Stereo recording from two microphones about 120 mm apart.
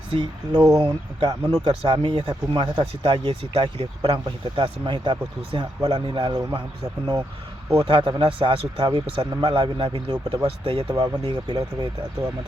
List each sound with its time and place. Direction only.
0.1 s speech: 40° right (ahead or behind)
7.9 s speech: 40° right (ahead or behind)